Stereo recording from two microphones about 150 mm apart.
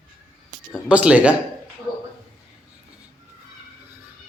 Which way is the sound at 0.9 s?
10° right (ahead or behind).